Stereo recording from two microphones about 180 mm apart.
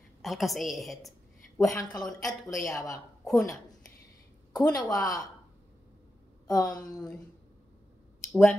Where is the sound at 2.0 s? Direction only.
Centre (ahead or behind).